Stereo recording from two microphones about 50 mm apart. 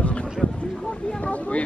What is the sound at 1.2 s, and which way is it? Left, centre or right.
Speech, left.